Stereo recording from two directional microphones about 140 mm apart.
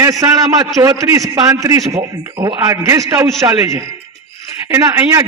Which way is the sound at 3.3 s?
20° right (ahead or behind).